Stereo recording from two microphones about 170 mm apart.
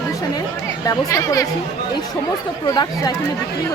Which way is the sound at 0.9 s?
20° left (ahead or behind).